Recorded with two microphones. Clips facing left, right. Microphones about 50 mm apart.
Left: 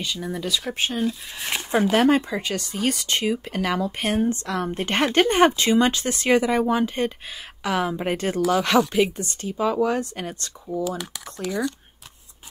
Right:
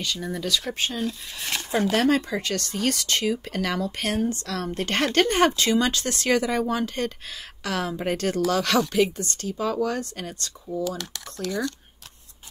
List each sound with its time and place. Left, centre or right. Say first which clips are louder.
0.0 s speech: left 1 dB; centre; by 10.8 s left
10.8 s speech: left 1 dB; centre